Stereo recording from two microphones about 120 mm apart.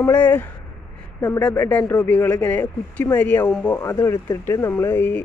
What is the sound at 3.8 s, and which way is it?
Speech, 25° left (ahead or behind).